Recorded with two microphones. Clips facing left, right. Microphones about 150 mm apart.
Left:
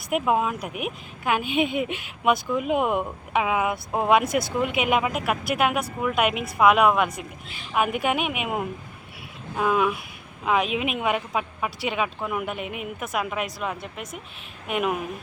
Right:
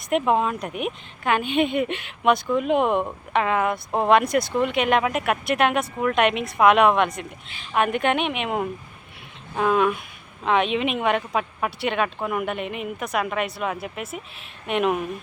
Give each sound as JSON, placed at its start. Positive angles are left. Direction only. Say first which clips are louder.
{"t": 0.1, "sound": "a woman's voice", "louder": "right 2 dB", "side_deg": 5}